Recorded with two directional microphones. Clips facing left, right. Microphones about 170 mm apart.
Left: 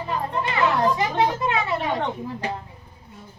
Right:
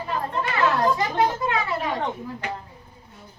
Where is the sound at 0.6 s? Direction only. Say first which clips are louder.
Even; 20° left (ahead or behind).